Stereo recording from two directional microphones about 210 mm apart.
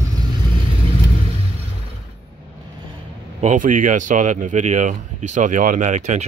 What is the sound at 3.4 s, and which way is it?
Speech, 35° right (ahead or behind).